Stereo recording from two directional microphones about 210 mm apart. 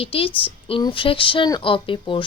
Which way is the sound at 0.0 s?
25° left (ahead or behind).